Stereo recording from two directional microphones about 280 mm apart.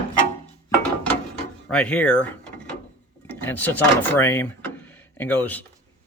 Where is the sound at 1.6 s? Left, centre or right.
Centre.